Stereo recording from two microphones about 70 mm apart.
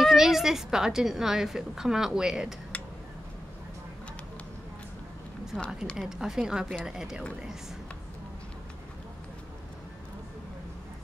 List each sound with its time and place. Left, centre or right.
0.0 s speech: centre
2.7 s a sound: centre
5.5 s a woman's voice: centre
5.9 s speech: centre